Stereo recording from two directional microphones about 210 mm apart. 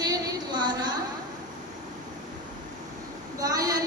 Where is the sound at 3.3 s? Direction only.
15° right (ahead or behind).